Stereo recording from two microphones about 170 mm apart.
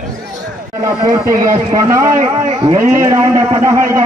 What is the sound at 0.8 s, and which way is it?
A man's voice, 20° right (ahead or behind).